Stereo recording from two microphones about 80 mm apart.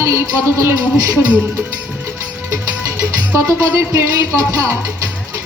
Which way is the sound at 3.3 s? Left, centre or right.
Right.